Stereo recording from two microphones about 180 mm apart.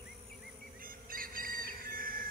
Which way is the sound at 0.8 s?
50° right (ahead or behind).